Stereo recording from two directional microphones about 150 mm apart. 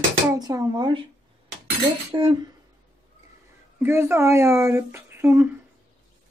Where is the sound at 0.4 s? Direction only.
25° right (ahead or behind).